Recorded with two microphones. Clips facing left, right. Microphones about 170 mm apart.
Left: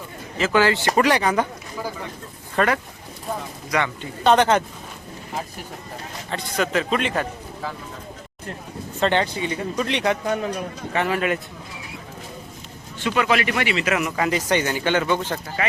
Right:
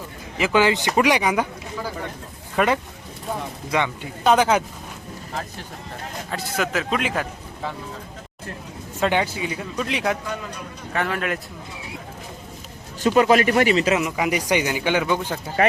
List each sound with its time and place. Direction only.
0.3 s a man's voice: 15° right (ahead or behind)
2.6 s speech: 20° right (ahead or behind); by 4.6 s 5° right (ahead or behind)
6.3 s speech: 5° right (ahead or behind)
9.0 s speech: 5° right (ahead or behind)
10.2 s speech: 60° left (ahead or behind)
10.9 s speech: centre (ahead or behind)
13.0 s a man's voice: 40° right (ahead or behind)
13.9 s a man's voice: 15° right (ahead or behind)